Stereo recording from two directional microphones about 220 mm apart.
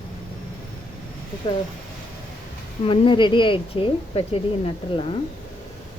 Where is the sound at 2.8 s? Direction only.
20° left (ahead or behind).